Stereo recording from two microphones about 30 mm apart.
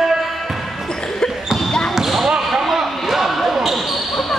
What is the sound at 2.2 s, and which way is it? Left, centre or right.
Basketball bounce, right.